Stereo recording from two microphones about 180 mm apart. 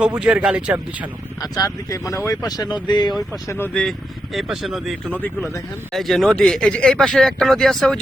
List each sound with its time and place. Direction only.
0.2 s speech: 5° right (ahead or behind)
1.4 s speech: 20° left (ahead or behind)
3.4 s speech: 15° left (ahead or behind)
4.4 s speech: centre (ahead or behind)